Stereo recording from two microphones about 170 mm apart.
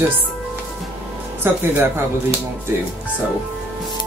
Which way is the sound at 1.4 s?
15° right (ahead or behind).